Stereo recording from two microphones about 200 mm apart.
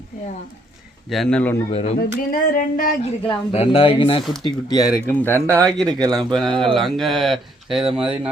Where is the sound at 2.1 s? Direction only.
45° left (ahead or behind).